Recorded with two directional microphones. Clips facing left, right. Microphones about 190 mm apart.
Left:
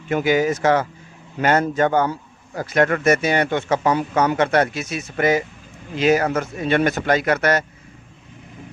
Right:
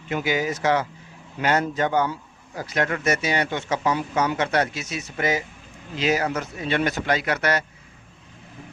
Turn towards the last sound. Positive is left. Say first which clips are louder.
# left 5 dB
turn(degrees=50)  # may be behind; listen again after turning